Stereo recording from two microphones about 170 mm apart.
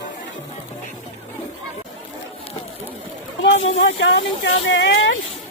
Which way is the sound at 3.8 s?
90° left.